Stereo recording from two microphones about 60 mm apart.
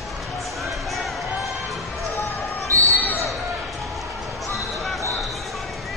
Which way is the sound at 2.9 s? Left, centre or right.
Left.